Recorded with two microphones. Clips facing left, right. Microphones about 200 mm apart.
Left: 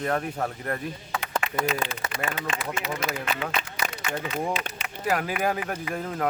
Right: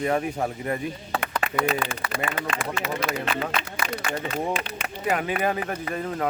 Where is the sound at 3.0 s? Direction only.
50° right (ahead or behind).